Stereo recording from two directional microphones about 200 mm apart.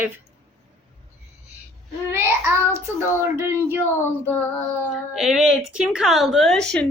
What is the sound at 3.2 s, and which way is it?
Speech, 10° right (ahead or behind).